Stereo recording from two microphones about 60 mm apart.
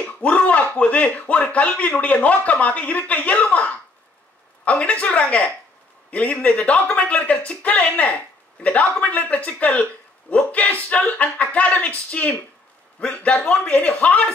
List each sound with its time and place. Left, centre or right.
0.0 s a man's voice: left